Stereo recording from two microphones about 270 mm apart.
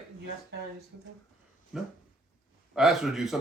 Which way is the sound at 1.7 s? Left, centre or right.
Centre.